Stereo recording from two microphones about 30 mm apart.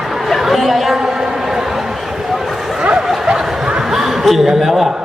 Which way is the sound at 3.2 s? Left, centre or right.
Right.